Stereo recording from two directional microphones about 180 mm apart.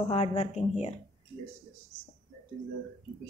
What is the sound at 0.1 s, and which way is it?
Speech, 35° left (ahead or behind).